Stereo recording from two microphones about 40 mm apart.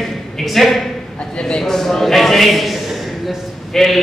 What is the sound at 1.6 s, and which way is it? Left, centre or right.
A man's voice, centre.